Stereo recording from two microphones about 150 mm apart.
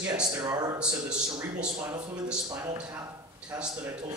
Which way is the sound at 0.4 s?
25° right (ahead or behind).